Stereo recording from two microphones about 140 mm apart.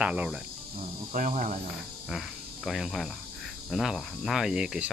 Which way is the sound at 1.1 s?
70° right (ahead or behind).